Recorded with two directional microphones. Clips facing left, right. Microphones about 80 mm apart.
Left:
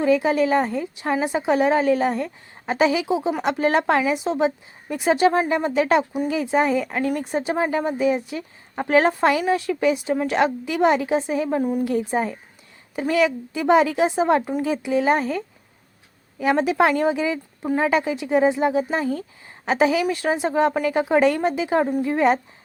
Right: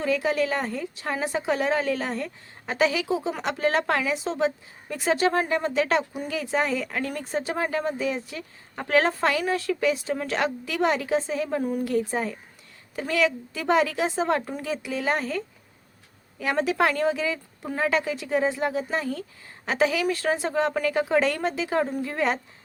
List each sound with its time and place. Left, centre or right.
0.0 s a woman's voice: left